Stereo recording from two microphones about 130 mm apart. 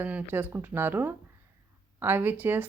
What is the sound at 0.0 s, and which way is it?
Speech, 15° right (ahead or behind).